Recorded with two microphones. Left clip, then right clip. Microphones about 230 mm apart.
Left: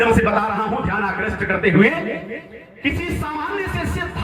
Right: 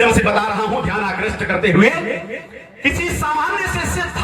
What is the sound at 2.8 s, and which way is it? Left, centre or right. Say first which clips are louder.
Music: right 5 dB; right.